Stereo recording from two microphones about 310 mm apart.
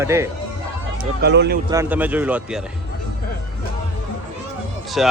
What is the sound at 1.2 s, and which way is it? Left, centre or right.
Speech, right.